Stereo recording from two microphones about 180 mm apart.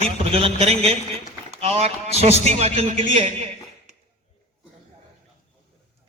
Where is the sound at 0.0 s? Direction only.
30° right (ahead or behind).